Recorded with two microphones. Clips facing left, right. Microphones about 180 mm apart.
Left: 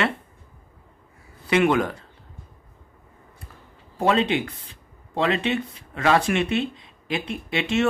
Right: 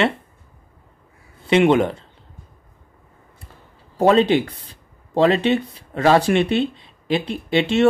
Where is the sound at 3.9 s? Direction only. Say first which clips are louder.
Right 6 dB; 40° right (ahead or behind).